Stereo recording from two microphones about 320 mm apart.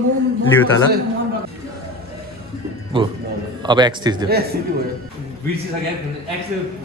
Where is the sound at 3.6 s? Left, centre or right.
Centre.